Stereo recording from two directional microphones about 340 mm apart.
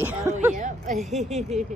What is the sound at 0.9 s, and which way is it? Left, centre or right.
Speech, centre.